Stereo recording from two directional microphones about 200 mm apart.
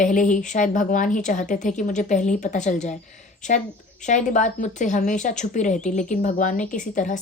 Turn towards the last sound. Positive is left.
turn(degrees=40)  # may be behind; listen again after turning